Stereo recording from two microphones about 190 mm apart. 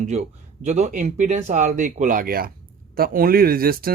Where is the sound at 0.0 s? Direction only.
35° right (ahead or behind).